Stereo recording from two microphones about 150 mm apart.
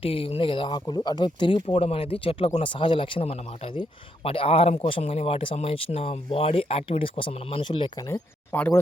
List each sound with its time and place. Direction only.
0.0 s speech: 40° left (ahead or behind)
8.1 s speech: 15° left (ahead or behind)